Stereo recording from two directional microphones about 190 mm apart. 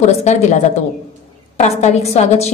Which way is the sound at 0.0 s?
35° left (ahead or behind).